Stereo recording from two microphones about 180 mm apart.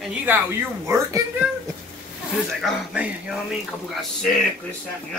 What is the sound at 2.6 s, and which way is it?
Speech, 5° right (ahead or behind).